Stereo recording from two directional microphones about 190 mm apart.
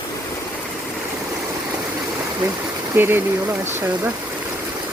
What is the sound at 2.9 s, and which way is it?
Speech, 10° right (ahead or behind).